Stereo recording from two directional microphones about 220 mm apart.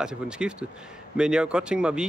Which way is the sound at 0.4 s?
5° right (ahead or behind).